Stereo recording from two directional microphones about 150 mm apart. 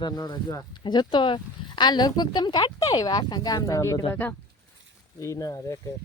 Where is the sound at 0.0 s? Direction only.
30° left (ahead or behind).